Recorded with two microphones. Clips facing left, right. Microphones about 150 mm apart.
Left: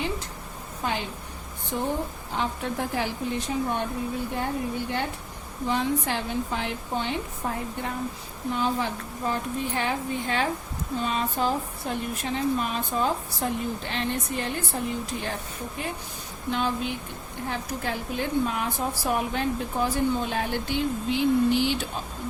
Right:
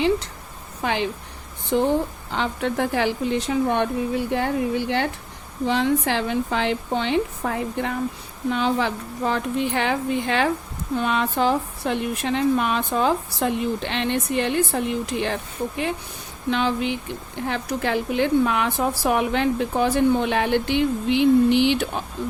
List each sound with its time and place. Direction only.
0.8 s a woman's voice: 90° right
10.9 s a woman's voice: 70° right (ahead or behind); by 15.4 s 85° right
16.5 s a woman's voice: 90° right; by 22.0 s 70° right (ahead or behind)